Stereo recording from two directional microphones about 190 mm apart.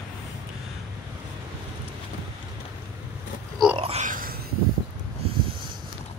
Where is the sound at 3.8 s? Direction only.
35° right (ahead or behind).